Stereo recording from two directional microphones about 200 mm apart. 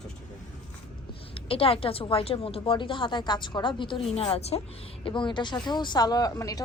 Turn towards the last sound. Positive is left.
turn(degrees=15)  # may be behind; listen again after turning